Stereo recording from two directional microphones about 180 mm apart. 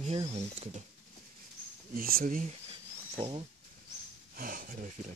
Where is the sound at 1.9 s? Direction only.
55° right (ahead or behind).